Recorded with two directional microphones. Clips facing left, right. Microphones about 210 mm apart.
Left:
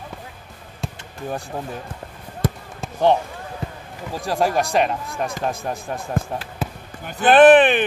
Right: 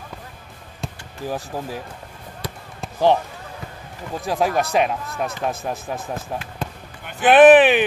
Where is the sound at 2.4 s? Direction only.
50° left (ahead or behind).